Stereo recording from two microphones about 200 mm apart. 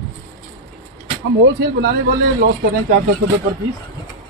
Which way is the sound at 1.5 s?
50° right (ahead or behind).